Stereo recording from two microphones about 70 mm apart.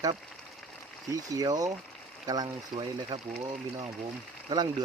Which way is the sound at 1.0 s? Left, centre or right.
Right.